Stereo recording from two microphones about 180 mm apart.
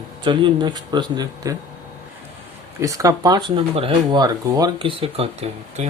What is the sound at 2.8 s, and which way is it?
Speech, 20° right (ahead or behind).